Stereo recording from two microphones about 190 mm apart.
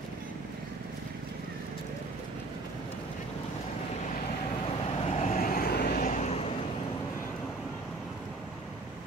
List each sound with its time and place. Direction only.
5.0 s vehicle: 35° left (ahead or behind); by 6.0 s 55° left (ahead or behind)
6.0 s vehicle: 40° left (ahead or behind)